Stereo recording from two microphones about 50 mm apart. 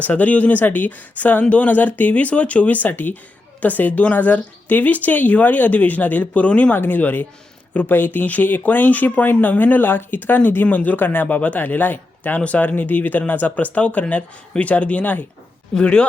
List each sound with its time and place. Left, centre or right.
0.0 s speech: left
6.7 s speech: left
15.8 s speech: centre